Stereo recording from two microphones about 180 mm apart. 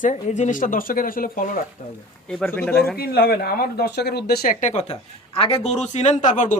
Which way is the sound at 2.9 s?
60° left (ahead or behind).